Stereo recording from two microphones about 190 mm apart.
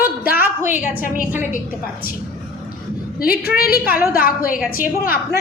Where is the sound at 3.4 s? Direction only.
55° left (ahead or behind).